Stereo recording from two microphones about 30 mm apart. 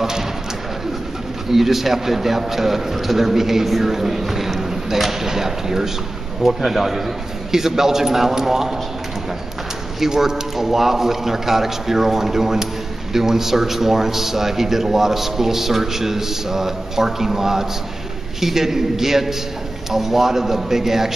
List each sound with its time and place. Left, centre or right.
0.0 s speech: centre
1.5 s a man's voice: centre
9.9 s a man's voice: centre